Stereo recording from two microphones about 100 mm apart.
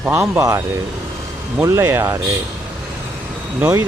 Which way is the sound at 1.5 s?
25° right (ahead or behind).